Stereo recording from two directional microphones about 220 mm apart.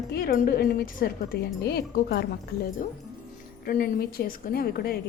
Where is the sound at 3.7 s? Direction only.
40° left (ahead or behind).